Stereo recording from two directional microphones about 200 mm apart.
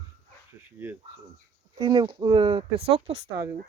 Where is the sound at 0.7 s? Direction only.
10° right (ahead or behind).